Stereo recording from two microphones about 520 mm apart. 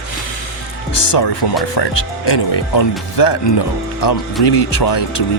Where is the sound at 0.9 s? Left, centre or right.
Left.